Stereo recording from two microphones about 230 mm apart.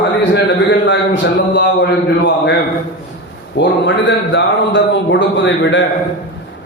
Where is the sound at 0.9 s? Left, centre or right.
Left.